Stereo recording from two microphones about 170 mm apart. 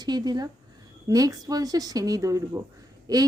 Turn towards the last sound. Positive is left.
turn(degrees=-25)  # may be behind; listen again after turning